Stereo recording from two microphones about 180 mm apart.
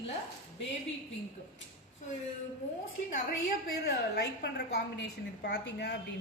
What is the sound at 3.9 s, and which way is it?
A woman's voice, 65° left (ahead or behind).